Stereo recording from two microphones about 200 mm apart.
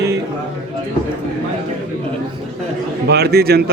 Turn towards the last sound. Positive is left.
turn(degrees=-50)  # may be behind; listen again after turning